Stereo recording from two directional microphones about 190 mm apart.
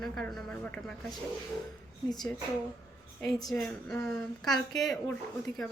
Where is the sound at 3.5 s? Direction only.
10° left (ahead or behind).